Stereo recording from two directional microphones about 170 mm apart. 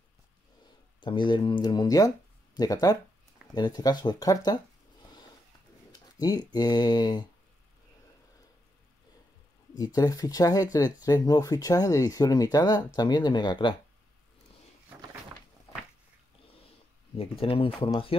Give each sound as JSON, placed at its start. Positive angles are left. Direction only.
{"t": 1.0, "sound": "speech", "side_deg": 30}
{"t": 5.9, "sound": "speech", "side_deg": 20}
{"t": 9.9, "sound": "speech", "side_deg": 20}
{"t": 17.2, "sound": "speech", "side_deg": 35}